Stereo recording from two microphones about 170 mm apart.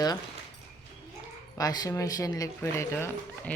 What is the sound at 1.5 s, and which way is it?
Speech, 20° left (ahead or behind).